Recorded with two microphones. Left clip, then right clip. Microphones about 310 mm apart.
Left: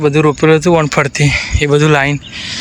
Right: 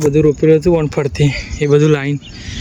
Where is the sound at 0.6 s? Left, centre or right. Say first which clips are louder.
Left 3 dB; left.